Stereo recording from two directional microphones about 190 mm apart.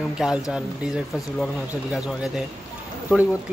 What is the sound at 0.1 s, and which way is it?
Speech, 5° right (ahead or behind).